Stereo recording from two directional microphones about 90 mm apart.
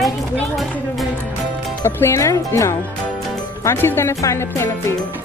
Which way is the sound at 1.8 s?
30° left (ahead or behind).